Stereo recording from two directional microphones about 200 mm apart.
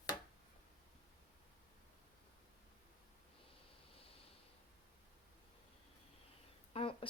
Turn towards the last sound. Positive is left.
turn(degrees=25)  # may be behind; listen again after turning